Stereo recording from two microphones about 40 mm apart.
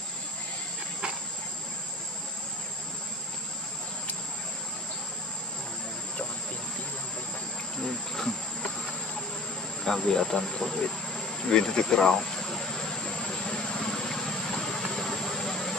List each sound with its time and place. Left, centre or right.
7.8 s insect: centre
9.8 s speech: centre
13.5 s vehicle: left